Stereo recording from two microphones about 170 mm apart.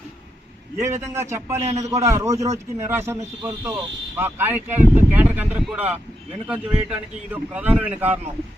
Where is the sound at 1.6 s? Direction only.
40° right (ahead or behind).